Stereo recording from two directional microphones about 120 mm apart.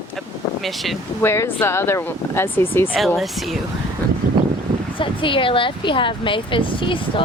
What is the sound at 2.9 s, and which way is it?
Speech, centre (ahead or behind).